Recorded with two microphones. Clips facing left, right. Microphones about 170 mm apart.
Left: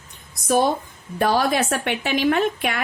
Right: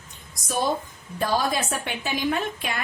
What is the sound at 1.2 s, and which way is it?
A woman's voice, 70° left (ahead or behind).